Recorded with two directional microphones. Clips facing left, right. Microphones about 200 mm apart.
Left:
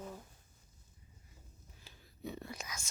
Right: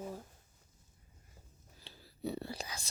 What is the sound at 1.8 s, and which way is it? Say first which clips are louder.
Whispering: right 5 dB; 35° right (ahead or behind).